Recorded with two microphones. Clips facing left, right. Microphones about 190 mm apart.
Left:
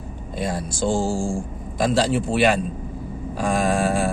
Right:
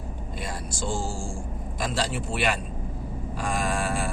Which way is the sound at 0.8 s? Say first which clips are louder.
Left 9 dB; 75° left (ahead or behind).